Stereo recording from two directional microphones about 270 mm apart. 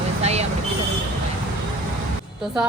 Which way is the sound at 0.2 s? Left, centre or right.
Right.